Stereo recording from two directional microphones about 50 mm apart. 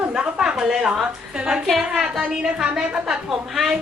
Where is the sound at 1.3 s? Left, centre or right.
Centre.